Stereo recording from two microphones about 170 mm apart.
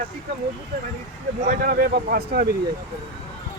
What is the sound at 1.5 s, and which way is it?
Speech, 60° right (ahead or behind).